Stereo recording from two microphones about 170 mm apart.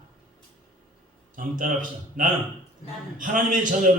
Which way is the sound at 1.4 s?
50° right (ahead or behind).